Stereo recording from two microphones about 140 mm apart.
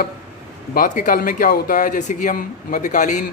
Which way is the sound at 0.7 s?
70° left (ahead or behind).